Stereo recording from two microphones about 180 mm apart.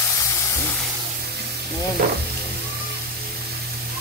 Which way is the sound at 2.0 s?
55° right (ahead or behind).